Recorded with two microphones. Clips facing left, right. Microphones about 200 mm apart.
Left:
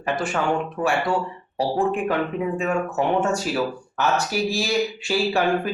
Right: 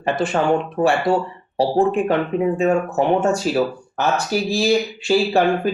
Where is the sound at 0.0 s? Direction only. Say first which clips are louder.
Right 5 dB; 30° right (ahead or behind).